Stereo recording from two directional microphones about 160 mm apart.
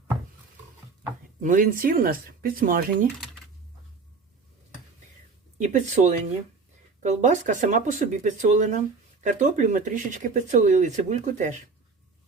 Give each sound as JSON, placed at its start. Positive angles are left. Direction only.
{"t": 1.4, "sound": "speech", "side_deg": -55}
{"t": 5.5, "sound": "speech", "side_deg": -45}